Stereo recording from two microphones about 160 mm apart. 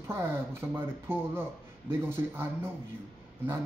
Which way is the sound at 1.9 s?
15° right (ahead or behind).